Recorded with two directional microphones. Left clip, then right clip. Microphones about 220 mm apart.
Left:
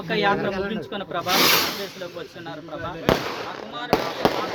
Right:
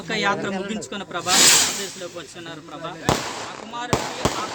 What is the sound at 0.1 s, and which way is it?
A man's voice, 60° right (ahead or behind).